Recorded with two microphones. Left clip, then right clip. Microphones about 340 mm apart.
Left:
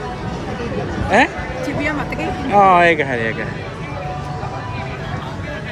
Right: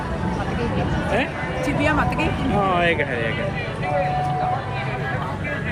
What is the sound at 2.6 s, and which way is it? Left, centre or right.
Speech, left.